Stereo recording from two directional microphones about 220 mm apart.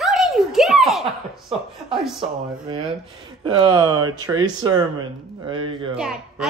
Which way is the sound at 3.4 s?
20° right (ahead or behind).